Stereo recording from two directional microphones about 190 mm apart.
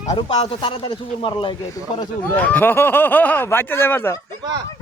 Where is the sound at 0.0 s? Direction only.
30° left (ahead or behind).